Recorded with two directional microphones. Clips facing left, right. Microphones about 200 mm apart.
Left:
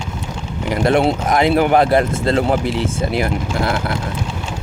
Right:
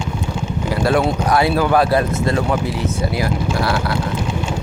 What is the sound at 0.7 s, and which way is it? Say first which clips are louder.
Speech: left 2 dB; 20° left (ahead or behind).